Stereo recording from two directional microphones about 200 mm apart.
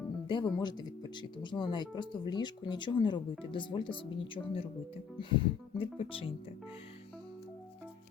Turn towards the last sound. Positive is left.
turn(degrees=25)  # may be behind; listen again after turning